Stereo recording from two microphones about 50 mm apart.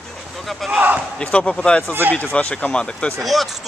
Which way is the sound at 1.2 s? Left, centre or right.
Left.